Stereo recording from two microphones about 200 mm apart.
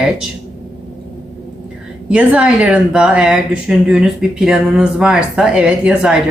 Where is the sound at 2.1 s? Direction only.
5° right (ahead or behind).